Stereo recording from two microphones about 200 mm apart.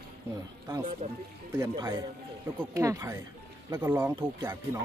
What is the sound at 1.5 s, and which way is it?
Speech, 15° right (ahead or behind).